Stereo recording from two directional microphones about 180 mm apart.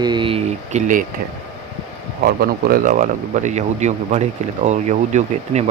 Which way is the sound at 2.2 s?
55° right (ahead or behind).